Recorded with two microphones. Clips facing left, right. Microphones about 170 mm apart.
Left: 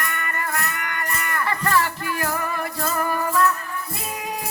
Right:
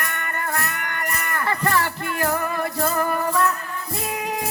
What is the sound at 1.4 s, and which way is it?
Music, 30° right (ahead or behind).